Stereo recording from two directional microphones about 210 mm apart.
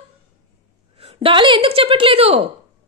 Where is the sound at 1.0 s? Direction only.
25° right (ahead or behind).